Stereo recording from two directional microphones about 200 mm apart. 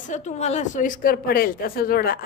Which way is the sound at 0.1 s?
35° left (ahead or behind).